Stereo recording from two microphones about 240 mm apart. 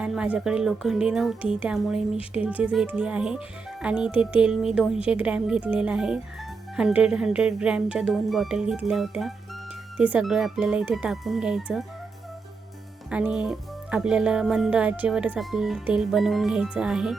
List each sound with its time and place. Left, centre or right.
0.0 s speech: centre
13.1 s speech: centre